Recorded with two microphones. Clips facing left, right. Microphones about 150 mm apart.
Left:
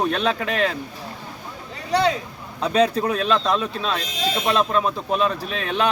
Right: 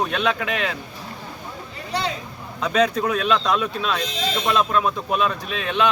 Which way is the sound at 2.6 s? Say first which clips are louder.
Left 1 dB; 30° left (ahead or behind).